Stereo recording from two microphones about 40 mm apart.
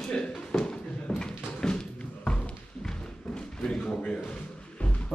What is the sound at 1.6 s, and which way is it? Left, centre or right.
Music, left.